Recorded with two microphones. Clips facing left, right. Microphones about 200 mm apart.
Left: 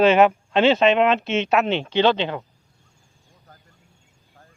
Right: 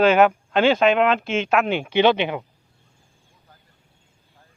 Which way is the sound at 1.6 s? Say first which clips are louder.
Right 1 dB; 10° right (ahead or behind).